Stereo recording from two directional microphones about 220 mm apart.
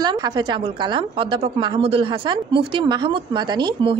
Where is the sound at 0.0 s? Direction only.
20° right (ahead or behind).